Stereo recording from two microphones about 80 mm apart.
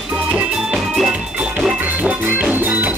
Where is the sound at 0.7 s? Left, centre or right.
Centre.